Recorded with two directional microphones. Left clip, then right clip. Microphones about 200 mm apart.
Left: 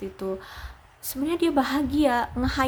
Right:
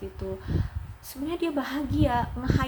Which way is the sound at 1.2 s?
25° left (ahead or behind).